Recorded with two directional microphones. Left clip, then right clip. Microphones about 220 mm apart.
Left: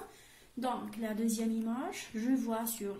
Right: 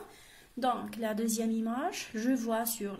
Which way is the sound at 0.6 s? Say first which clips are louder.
Right 5 dB; 35° right (ahead or behind).